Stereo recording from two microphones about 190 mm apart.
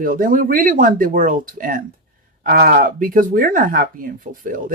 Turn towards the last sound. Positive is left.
turn(degrees=-45)  # may be behind; listen again after turning